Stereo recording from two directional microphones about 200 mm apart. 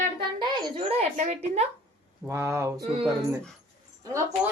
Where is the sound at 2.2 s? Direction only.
15° right (ahead or behind).